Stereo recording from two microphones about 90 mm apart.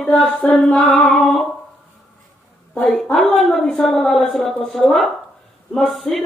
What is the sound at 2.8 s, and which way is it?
A woman's voice, 10° left (ahead or behind).